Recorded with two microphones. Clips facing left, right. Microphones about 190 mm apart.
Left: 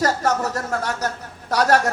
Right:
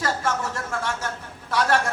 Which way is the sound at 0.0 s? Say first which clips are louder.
Left 5 dB; 40° left (ahead or behind).